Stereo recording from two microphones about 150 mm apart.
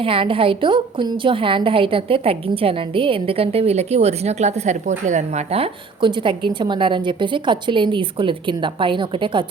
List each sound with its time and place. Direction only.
0.0 s a woman's voice: 35° right (ahead or behind)